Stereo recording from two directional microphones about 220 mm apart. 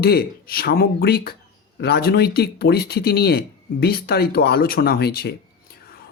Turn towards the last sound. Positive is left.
turn(degrees=45)  # may be behind; listen again after turning